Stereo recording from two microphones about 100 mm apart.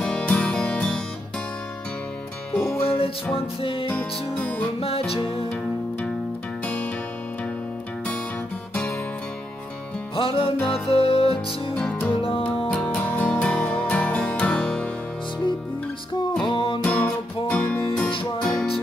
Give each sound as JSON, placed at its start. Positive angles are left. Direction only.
{"t": 0.0, "sound": "music", "side_deg": 10}
{"t": 2.5, "sound": "music", "side_deg": 20}
{"t": 2.8, "sound": "music", "side_deg": 70}
{"t": 3.3, "sound": "music", "side_deg": 60}
{"t": 3.9, "sound": "music", "side_deg": 15}
{"t": 4.7, "sound": "music", "side_deg": 75}
{"t": 10.1, "sound": "music", "side_deg": 60}
{"t": 10.7, "sound": "music", "side_deg": 70}
{"t": 11.7, "sound": "music", "side_deg": 10}
{"t": 12.1, "sound": "music", "side_deg": 60}
{"t": 12.6, "sound": "music", "side_deg": 15}
{"t": 16.4, "sound": "music", "side_deg": 55}
{"t": 16.8, "sound": "music", "side_deg": 10}